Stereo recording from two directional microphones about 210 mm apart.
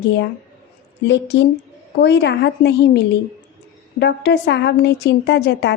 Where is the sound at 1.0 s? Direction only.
55° left (ahead or behind).